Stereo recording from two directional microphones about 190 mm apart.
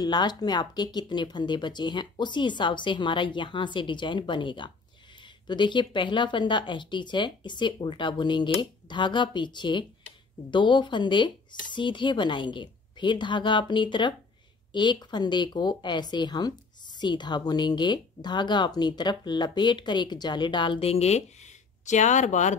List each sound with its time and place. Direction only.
0.0 s speech: 20° left (ahead or behind); by 22.6 s 40° left (ahead or behind)